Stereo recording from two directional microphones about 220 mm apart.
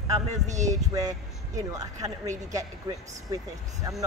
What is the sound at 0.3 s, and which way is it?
Speech, 35° right (ahead or behind).